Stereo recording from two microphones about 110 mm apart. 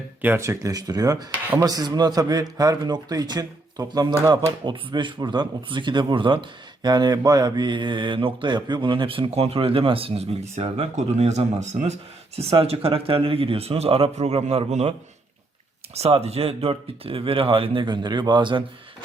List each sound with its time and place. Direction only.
0.2 s speech: 20° right (ahead or behind)
4.6 s speech: 45° right (ahead or behind); by 11.9 s 90° right
12.4 s speech: 65° right (ahead or behind)
16.0 s speech: 70° right (ahead or behind); by 18.6 s 45° right (ahead or behind)